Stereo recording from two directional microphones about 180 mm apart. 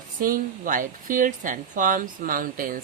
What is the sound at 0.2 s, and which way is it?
Speech, 50° right (ahead or behind).